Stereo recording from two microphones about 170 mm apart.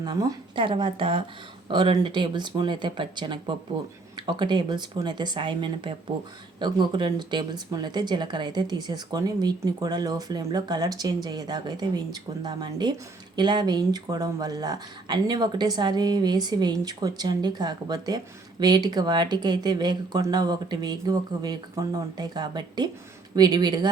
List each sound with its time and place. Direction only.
0.0 s speech: 25° right (ahead or behind)